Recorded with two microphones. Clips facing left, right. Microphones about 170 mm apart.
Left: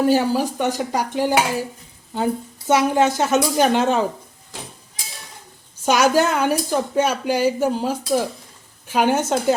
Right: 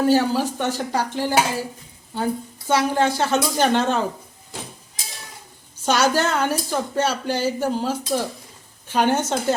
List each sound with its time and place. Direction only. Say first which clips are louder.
0.0 s a woman's voice: left 1 dB; 15° left (ahead or behind)
5.8 s speech: left 3 dB; 10° left (ahead or behind)